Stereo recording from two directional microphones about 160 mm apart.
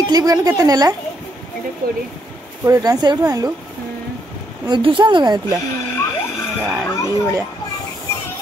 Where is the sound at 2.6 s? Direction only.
25° right (ahead or behind).